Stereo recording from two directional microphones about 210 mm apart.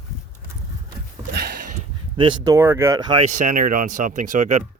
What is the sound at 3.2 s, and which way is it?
Speech, 35° right (ahead or behind).